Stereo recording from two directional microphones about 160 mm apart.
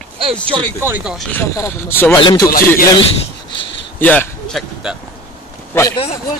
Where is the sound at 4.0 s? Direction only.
10° left (ahead or behind).